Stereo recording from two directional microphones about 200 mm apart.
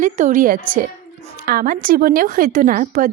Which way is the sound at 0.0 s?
40° right (ahead or behind).